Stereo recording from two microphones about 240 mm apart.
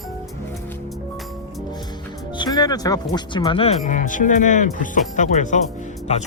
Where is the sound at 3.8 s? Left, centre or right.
Left.